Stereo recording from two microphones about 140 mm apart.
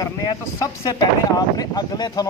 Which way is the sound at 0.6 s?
25° left (ahead or behind).